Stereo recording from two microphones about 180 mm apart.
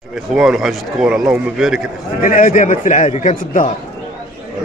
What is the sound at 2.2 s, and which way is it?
A man's voice, 50° left (ahead or behind).